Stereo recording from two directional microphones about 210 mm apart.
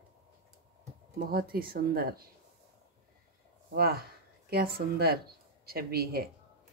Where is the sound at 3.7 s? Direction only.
45° right (ahead or behind).